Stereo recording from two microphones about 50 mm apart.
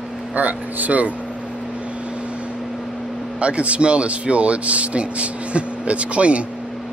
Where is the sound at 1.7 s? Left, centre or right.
Right.